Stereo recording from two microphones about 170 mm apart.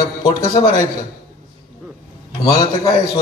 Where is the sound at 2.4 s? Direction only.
20° left (ahead or behind).